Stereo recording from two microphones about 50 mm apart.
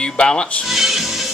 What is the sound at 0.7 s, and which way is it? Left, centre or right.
Music, centre.